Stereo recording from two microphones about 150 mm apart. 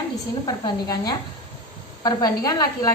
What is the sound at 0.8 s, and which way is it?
A woman's voice, 25° left (ahead or behind).